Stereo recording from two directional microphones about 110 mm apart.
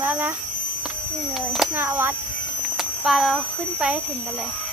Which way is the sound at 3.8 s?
10° right (ahead or behind).